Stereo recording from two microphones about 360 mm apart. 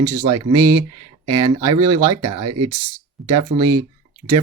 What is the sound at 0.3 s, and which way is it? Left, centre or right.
Speech, centre.